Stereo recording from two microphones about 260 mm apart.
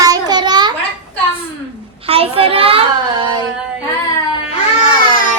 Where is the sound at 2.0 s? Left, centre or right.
Right.